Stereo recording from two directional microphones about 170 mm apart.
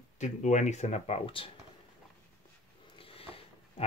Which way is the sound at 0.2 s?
45° left (ahead or behind).